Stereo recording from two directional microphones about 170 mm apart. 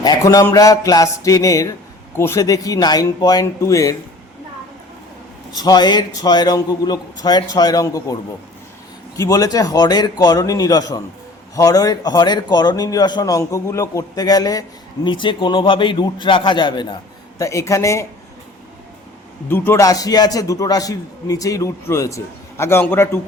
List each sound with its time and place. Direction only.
0.0 s speech: 20° left (ahead or behind)
5.5 s speech: 25° left (ahead or behind)
9.1 s speech: 20° left (ahead or behind)
19.5 s speech: 15° left (ahead or behind)